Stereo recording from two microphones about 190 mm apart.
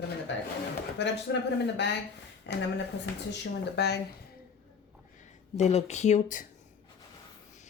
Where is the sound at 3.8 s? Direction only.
60° left (ahead or behind).